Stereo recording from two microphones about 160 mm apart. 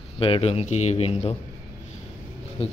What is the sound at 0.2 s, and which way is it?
Speech, 35° left (ahead or behind).